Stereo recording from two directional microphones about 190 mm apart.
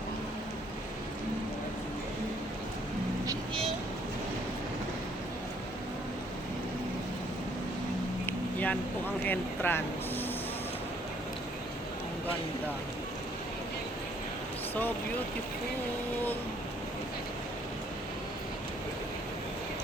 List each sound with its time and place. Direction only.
8.3 s vehicle: 10° left (ahead or behind)
9.2 s speech: 10° left (ahead or behind)